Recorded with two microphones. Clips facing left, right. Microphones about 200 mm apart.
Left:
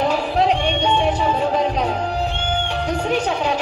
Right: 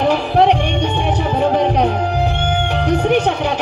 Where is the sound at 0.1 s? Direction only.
65° right (ahead or behind).